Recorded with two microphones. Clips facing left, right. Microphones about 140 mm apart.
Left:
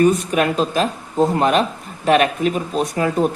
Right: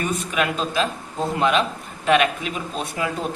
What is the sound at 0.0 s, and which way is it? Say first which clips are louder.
Speech: left 8 dB; 40° left (ahead or behind).